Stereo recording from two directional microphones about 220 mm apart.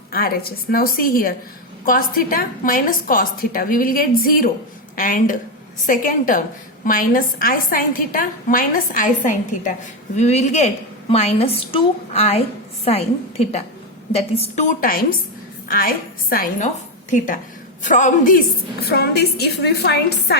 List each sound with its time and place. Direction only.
0.1 s a woman's voice: 40° left (ahead or behind)